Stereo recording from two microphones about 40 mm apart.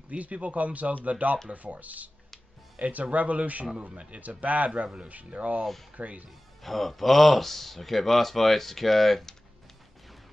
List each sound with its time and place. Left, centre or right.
0.1 s speech: right
3.7 s speech: right
4.2 s speech: right
6.6 s speech: centre